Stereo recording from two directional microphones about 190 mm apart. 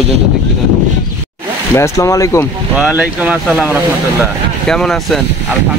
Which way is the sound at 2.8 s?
5° right (ahead or behind).